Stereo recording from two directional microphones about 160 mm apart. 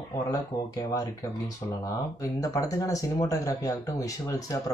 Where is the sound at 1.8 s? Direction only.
20° left (ahead or behind).